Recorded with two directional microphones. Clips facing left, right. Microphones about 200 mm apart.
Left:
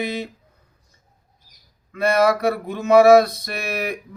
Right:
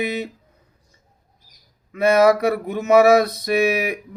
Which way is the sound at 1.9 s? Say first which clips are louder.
Right 3 dB; 20° right (ahead or behind).